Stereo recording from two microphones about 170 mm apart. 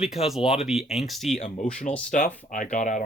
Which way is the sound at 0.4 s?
35° left (ahead or behind).